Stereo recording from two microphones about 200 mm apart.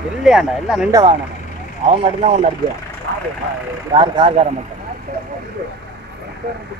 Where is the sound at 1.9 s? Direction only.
35° right (ahead or behind).